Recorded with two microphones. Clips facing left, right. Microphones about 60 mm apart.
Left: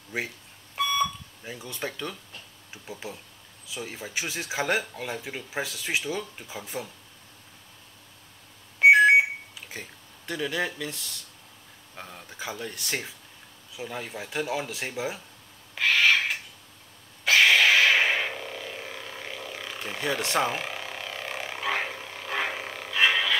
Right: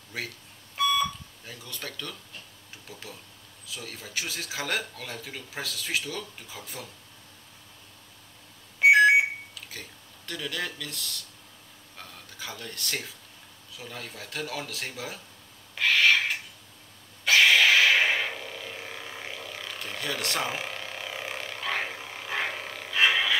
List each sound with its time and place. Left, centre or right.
0.1 s speech: left
0.7 s alarm clock: centre
1.4 s speech: centre
8.8 s alarm: centre
9.7 s speech: centre
15.7 s owl: centre
17.2 s a sound: centre
20.4 s a sound: centre
21.5 s a sound: centre